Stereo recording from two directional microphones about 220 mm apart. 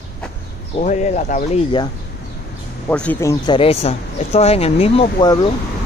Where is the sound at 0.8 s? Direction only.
35° left (ahead or behind).